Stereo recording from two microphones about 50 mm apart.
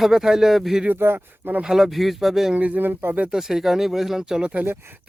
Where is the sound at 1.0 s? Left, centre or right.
Right.